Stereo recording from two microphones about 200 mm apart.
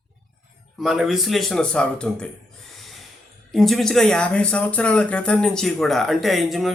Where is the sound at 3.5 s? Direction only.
Centre (ahead or behind).